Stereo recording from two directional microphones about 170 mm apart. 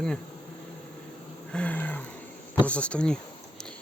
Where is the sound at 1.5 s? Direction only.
10° left (ahead or behind).